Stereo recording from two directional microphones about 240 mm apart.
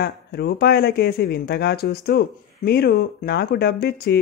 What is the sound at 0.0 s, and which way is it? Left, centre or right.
Speech, left.